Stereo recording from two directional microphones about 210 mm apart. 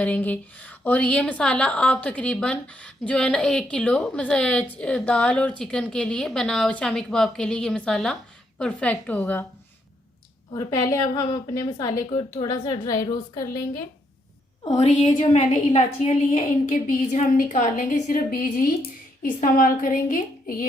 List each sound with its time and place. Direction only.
0.0 s a woman's voice: 5° left (ahead or behind)
10.5 s a woman's voice: 15° left (ahead or behind)
14.8 s a woman's voice: 30° left (ahead or behind)